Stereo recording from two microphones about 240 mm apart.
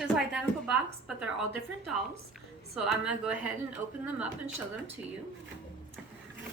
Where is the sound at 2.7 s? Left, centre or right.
Centre.